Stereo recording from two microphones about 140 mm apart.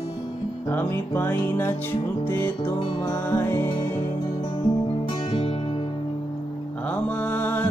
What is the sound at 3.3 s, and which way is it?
Music, 15° left (ahead or behind).